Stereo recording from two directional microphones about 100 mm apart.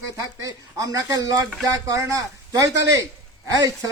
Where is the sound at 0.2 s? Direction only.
35° right (ahead or behind).